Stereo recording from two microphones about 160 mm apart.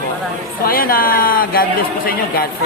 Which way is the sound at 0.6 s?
65° left (ahead or behind).